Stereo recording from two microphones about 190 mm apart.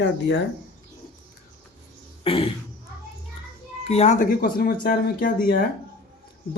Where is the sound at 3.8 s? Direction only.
35° left (ahead or behind).